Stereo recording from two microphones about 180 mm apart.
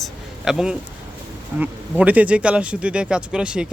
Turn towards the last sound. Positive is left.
turn(degrees=-5)  # may be behind; listen again after turning